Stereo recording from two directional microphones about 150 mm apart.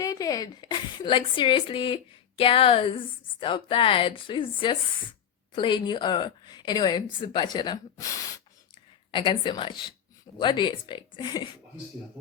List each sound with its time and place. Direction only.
0.0 s a woman's voice: 25° left (ahead or behind)
9.1 s a woman's voice: 35° left (ahead or behind)